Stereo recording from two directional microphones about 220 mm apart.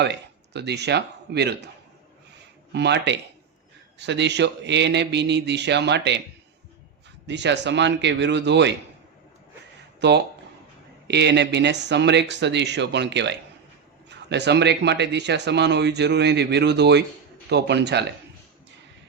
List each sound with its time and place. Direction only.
0.0 s speech: 50° right (ahead or behind)
2.7 s speech: 50° right (ahead or behind)
7.3 s speech: 50° right (ahead or behind)
10.0 s speech: 50° right (ahead or behind)